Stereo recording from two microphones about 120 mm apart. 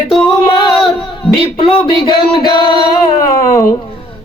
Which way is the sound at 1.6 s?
45° left (ahead or behind).